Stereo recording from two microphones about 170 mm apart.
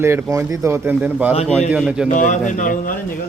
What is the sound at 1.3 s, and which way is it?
Speech, 40° left (ahead or behind).